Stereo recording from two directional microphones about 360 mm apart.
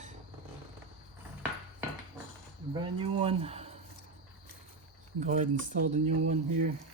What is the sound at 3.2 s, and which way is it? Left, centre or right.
Speech, centre.